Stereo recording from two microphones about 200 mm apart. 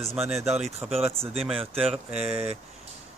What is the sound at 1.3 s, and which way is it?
Speech, centre (ahead or behind).